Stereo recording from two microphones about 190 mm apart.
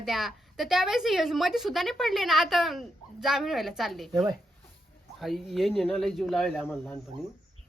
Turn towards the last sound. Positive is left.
turn(degrees=0)  # may be behind; listen again after turning